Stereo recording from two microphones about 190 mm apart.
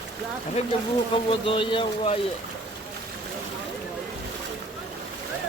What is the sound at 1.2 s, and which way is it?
Speech, 25° left (ahead or behind).